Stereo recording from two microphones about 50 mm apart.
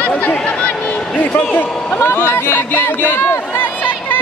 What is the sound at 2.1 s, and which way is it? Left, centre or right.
Speech, left.